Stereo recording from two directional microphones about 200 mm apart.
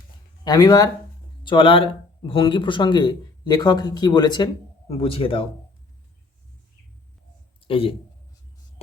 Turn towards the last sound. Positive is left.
turn(degrees=25)  # may be behind; listen again after turning